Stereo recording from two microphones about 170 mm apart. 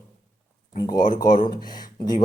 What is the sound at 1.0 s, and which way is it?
Speech, 55° left (ahead or behind).